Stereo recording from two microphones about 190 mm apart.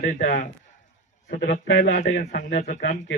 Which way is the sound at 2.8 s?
70° left (ahead or behind).